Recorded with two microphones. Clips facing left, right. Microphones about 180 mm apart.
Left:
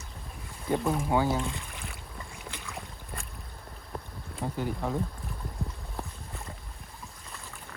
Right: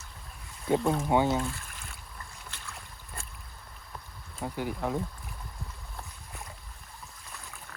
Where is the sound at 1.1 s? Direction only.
20° right (ahead or behind).